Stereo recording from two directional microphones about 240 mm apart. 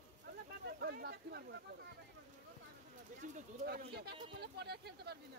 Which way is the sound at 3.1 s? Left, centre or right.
Right.